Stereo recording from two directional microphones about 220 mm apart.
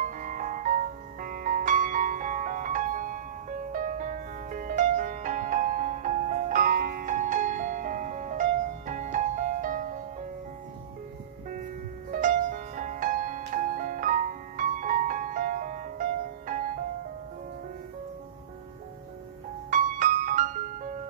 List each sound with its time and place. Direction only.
0.0 s music: 35° right (ahead or behind)
12.1 s music: 35° right (ahead or behind)
19.7 s music: 35° right (ahead or behind)